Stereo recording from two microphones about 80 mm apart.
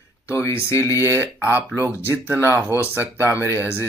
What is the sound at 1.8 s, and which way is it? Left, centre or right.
Speech, right.